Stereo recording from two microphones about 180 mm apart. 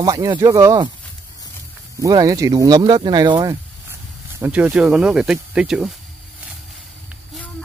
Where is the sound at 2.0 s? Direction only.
20° right (ahead or behind).